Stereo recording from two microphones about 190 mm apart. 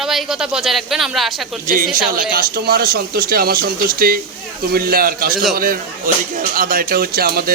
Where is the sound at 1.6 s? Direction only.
50° right (ahead or behind).